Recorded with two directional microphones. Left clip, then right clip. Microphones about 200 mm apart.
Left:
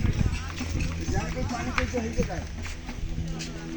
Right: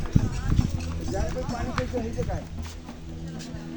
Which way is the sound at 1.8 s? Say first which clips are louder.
Left 3 dB; 65° right (ahead or behind).